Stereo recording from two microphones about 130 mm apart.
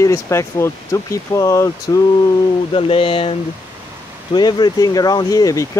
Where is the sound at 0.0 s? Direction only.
20° left (ahead or behind).